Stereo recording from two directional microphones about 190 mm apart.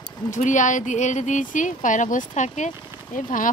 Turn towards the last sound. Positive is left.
turn(degrees=45)  # may be behind; listen again after turning